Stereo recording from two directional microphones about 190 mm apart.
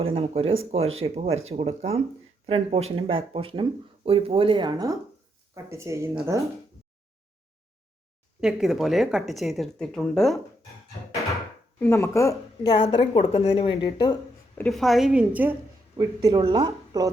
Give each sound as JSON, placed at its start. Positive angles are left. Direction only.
{"t": 0.0, "sound": "speech", "side_deg": -30}
{"t": 8.4, "sound": "speech", "side_deg": -5}
{"t": 11.8, "sound": "a woman's voice", "side_deg": 15}
{"t": 14.6, "sound": "speech", "side_deg": 0}
{"t": 16.0, "sound": "speech", "side_deg": -20}